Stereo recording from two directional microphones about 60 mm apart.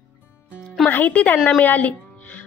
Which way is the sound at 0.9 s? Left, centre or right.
Left.